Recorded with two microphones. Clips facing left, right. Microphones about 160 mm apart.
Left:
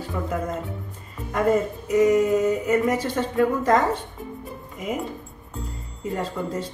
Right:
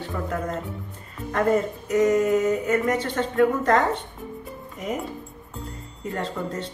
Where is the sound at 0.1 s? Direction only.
5° left (ahead or behind).